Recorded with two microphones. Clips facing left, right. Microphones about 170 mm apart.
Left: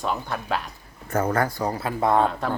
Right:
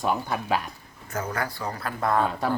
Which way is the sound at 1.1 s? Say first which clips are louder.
Left 7 dB; 55° left (ahead or behind).